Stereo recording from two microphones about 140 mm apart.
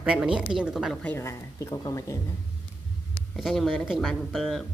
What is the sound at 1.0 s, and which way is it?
Speech, 15° left (ahead or behind).